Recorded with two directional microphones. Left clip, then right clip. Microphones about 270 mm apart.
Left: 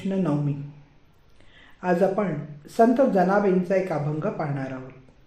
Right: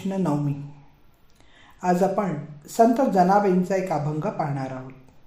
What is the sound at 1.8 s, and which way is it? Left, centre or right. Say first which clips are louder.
Speech: even; right.